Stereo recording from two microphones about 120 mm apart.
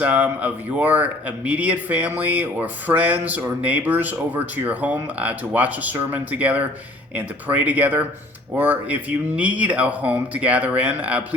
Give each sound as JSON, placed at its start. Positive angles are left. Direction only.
{"t": 0.0, "sound": "speech", "side_deg": -10}